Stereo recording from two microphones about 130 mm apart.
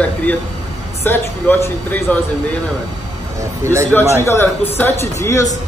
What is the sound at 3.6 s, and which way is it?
Speech, 25° right (ahead or behind).